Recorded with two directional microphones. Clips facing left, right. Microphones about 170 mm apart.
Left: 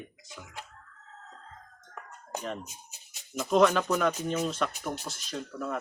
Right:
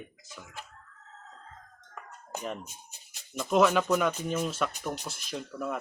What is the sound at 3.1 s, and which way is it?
Speech, centre (ahead or behind).